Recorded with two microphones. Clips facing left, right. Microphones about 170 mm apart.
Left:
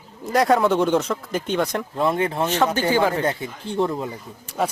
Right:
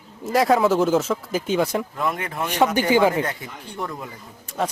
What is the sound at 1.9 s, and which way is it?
Speech, 30° left (ahead or behind).